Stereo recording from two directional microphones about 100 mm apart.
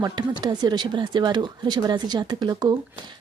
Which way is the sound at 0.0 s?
45° right (ahead or behind).